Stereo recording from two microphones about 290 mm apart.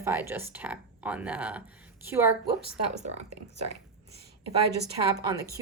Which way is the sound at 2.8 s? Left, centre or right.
Right.